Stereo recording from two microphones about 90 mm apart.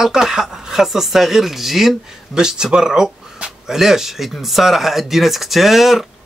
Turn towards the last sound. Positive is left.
turn(degrees=0)  # may be behind; listen again after turning